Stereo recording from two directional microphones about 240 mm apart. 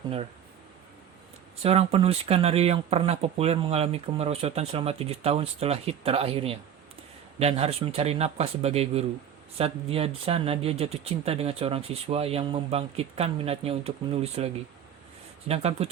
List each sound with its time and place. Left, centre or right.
1.6 s speech: right